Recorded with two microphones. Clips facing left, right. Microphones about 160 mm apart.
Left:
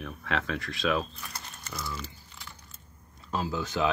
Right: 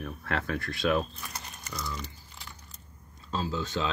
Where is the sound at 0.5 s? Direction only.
90° left.